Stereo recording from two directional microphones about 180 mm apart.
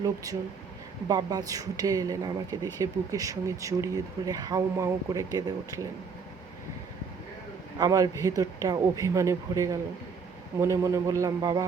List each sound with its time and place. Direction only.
0.0 s a woman's voice: 20° right (ahead or behind)
7.8 s a man's voice: 20° right (ahead or behind)